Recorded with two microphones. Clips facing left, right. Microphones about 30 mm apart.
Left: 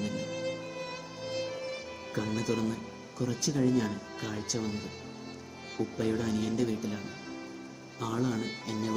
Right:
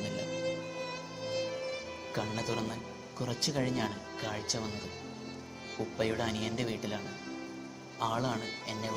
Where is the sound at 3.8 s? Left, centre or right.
Centre.